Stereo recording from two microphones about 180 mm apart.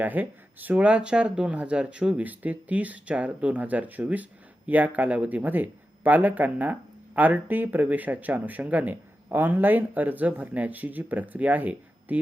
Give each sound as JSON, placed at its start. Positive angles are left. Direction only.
{"t": 0.0, "sound": "speech", "side_deg": -10}